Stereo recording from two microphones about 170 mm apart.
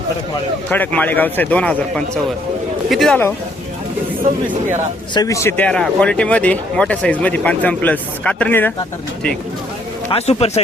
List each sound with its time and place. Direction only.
0.7 s speech: 10° left (ahead or behind)
5.1 s speech: 20° left (ahead or behind)
10.1 s a man's voice: 40° left (ahead or behind)